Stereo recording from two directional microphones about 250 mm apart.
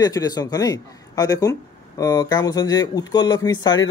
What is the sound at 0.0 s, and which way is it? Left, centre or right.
Speech, centre.